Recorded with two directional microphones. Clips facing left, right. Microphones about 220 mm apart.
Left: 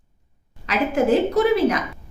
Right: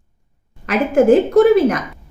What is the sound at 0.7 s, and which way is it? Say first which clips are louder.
A woman's voice: right 6 dB; 50° right (ahead or behind).